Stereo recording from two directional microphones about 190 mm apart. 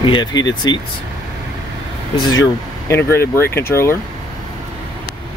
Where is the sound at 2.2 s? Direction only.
15° left (ahead or behind).